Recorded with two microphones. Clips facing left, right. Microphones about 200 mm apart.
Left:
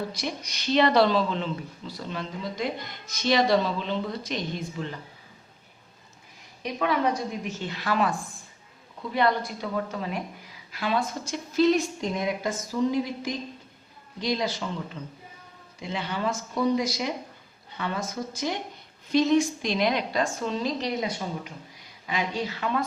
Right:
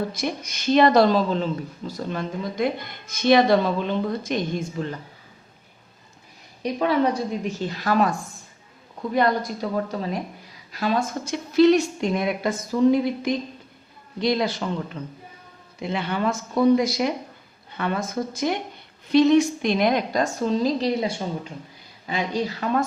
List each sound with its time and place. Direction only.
0.1 s speech: 50° right (ahead or behind)
6.6 s a woman's voice: 35° right (ahead or behind)
11.3 s speech: 70° right (ahead or behind); by 18.6 s 55° right (ahead or behind)
19.0 s a woman's voice: 65° right (ahead or behind); by 22.8 s 40° right (ahead or behind)